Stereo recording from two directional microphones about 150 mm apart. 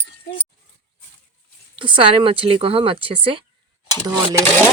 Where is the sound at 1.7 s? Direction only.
35° right (ahead or behind).